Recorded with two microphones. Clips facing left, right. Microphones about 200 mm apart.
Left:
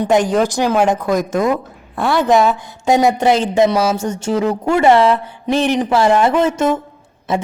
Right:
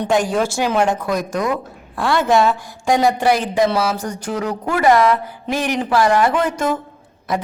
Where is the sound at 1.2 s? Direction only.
25° left (ahead or behind).